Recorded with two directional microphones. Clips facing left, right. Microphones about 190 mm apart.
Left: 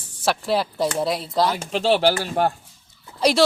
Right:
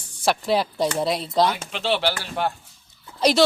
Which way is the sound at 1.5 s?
40° left (ahead or behind).